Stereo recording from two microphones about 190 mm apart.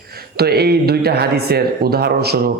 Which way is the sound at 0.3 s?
55° right (ahead or behind).